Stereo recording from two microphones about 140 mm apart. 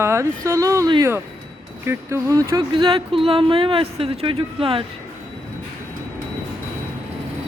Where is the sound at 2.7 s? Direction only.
35° right (ahead or behind).